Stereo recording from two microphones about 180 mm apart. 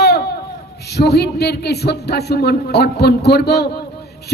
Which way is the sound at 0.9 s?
65° left (ahead or behind).